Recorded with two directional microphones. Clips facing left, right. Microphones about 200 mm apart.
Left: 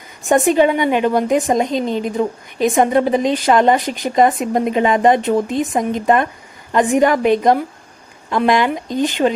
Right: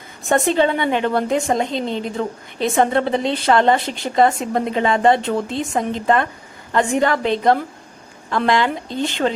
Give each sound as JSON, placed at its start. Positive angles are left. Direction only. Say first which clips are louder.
{"t": 0.3, "sound": "a woman's voice", "louder": "left 4 dB", "side_deg": 15}